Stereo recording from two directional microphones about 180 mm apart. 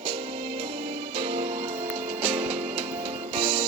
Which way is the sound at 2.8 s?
30° right (ahead or behind).